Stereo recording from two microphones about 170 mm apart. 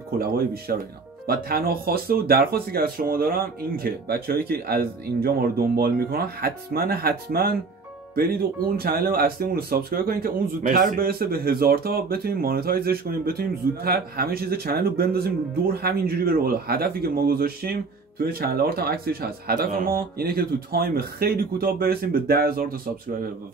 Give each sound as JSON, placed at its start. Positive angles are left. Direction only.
{"t": 0.2, "sound": "speech", "side_deg": -60}